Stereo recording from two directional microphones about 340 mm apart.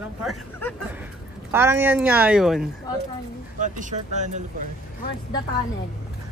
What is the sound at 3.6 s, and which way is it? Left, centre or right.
Speech, right.